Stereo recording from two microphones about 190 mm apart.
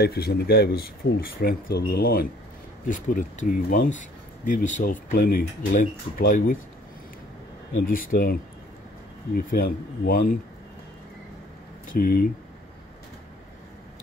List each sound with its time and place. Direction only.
0.0 s speech: 55° left (ahead or behind)
2.9 s speech: 45° left (ahead or behind)
7.8 s speech: 45° left (ahead or behind)
11.9 s speech: 50° left (ahead or behind)